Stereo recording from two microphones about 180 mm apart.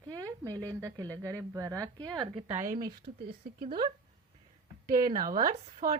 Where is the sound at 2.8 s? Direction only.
25° right (ahead or behind).